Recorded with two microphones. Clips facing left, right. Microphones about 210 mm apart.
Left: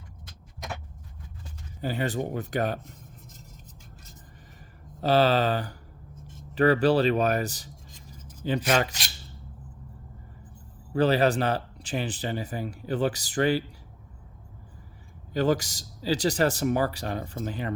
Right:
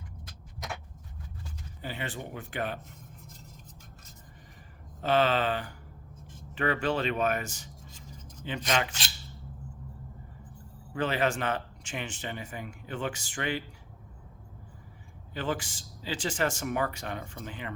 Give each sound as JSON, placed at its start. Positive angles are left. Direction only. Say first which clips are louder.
{"t": 1.8, "sound": "speech", "louder": "left 9 dB", "side_deg": 40}
{"t": 4.9, "sound": "speech", "louder": "left 4 dB", "side_deg": 35}
{"t": 10.9, "sound": "speech", "louder": "left 7 dB", "side_deg": 35}
{"t": 15.3, "sound": "speech", "louder": "left 8 dB", "side_deg": 40}